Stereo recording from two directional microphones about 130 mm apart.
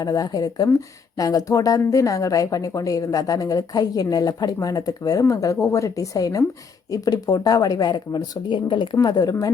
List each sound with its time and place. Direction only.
0.0 s a woman's voice: 30° left (ahead or behind)